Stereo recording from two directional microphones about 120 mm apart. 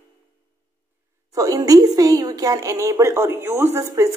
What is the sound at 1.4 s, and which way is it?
A woman's voice, 30° right (ahead or behind).